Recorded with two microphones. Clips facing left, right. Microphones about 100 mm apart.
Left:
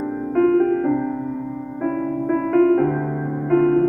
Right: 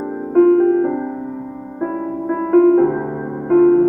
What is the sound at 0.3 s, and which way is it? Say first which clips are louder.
Music: right 5 dB; 25° right (ahead or behind).